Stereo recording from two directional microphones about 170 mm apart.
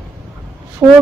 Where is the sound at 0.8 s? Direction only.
5° right (ahead or behind).